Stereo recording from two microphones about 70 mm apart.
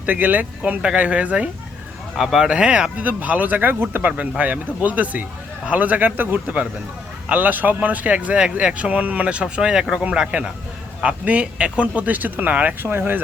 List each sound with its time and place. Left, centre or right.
0.0 s speech: right
2.1 s speech: centre; by 13.2 s right